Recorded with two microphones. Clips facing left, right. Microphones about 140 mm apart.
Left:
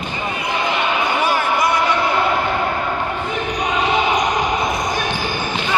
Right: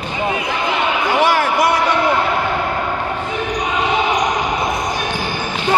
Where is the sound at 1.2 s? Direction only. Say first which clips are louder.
Right 4 dB; 90° right.